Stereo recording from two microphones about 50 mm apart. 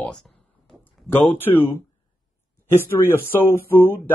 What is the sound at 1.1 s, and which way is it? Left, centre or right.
Speech, left.